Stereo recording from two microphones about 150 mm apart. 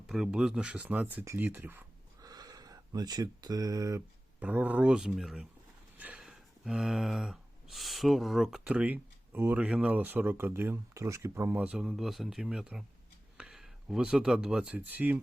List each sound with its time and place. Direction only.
0.1 s speech: 5° right (ahead or behind)
2.2 s speech: 25° right (ahead or behind)